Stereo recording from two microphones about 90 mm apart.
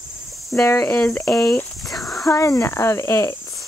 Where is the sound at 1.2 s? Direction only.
35° left (ahead or behind).